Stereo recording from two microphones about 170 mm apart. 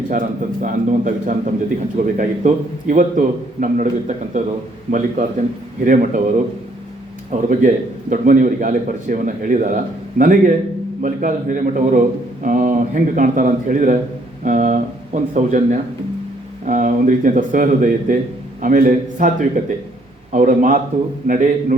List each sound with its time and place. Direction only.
0.6 s a man's voice: 50° right (ahead or behind)
7.3 s a man's voice: 45° right (ahead or behind)